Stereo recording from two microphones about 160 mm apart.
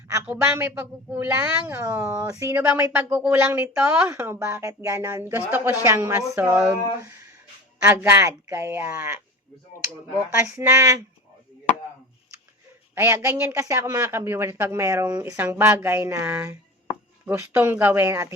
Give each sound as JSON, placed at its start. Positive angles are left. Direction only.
{"t": 0.3, "sound": "speech", "side_deg": -10}
{"t": 7.8, "sound": "speech", "side_deg": -20}
{"t": 10.4, "sound": "speech", "side_deg": -20}
{"t": 12.9, "sound": "speech", "side_deg": -15}